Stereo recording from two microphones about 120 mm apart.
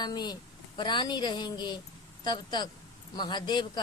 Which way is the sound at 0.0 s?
35° left (ahead or behind).